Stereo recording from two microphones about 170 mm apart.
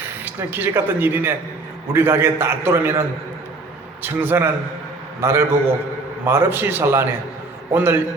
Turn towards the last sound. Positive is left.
turn(degrees=-15)  # may be behind; listen again after turning